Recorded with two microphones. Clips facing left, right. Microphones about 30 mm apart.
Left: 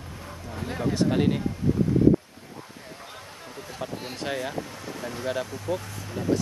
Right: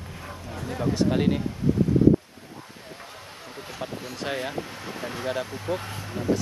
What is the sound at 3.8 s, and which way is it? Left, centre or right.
Speech, centre.